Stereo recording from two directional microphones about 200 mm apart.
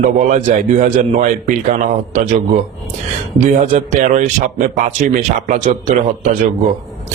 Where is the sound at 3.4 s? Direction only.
35° right (ahead or behind).